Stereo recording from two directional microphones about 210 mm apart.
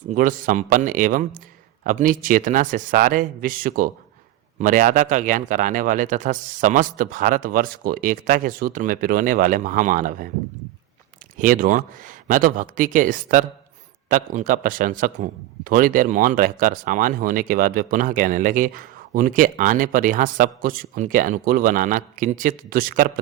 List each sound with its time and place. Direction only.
0.1 s speech: 40° right (ahead or behind)
11.3 s speech: 40° right (ahead or behind)